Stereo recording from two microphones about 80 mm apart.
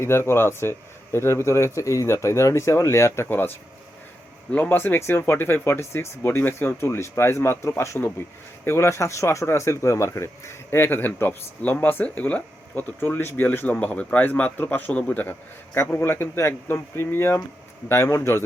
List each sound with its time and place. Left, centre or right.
0.0 s speech: left
4.5 s speech: left
15.7 s speech: left